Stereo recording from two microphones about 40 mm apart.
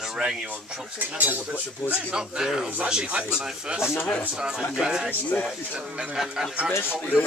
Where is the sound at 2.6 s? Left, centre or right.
Right.